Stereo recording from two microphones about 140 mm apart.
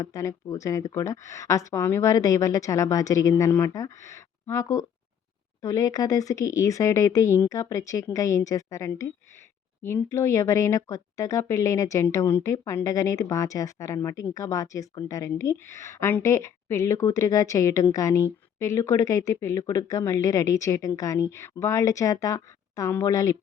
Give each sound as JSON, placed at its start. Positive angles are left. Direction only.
{"t": 0.0, "sound": "speech", "side_deg": 25}